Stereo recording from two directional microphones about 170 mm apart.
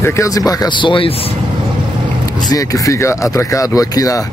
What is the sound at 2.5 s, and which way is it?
Speech, 15° left (ahead or behind).